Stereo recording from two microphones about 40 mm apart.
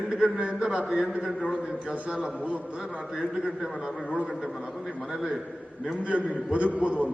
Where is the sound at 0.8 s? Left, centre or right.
Centre.